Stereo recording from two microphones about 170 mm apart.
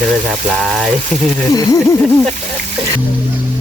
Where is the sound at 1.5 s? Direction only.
20° left (ahead or behind).